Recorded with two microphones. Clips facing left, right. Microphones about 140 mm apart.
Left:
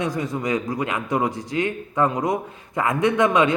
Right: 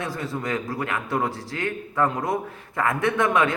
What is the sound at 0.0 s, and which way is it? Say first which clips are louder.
A man's voice: left 4 dB; 20° left (ahead or behind).